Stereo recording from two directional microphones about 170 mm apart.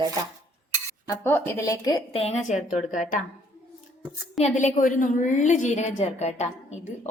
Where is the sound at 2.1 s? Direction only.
35° left (ahead or behind).